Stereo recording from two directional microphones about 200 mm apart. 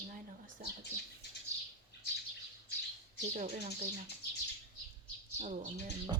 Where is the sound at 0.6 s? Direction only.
45° right (ahead or behind).